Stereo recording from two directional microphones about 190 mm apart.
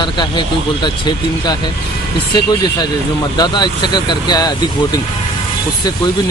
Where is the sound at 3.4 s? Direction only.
25° left (ahead or behind).